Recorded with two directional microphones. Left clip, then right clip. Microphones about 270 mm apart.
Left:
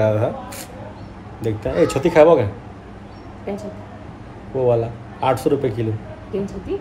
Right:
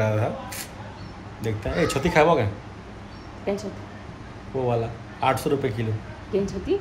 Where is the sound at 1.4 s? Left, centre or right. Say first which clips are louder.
Left 7 dB; centre.